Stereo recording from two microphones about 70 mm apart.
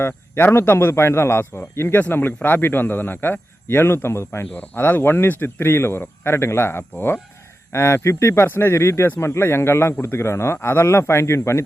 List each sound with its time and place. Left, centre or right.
0.0 s speech: left
4.5 s speech: left